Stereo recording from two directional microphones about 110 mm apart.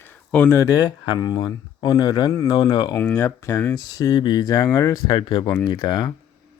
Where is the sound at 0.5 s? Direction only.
35° left (ahead or behind).